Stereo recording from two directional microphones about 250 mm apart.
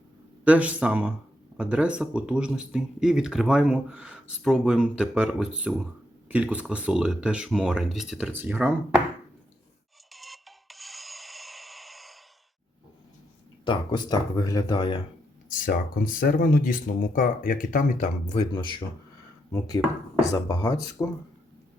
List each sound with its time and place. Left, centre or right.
0.4 s speech: centre
10.1 s music: centre
13.7 s speech: centre
15.4 s speech: left
19.5 s speech: centre